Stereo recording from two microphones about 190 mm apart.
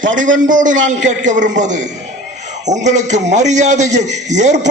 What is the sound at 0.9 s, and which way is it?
A man's voice, 40° right (ahead or behind).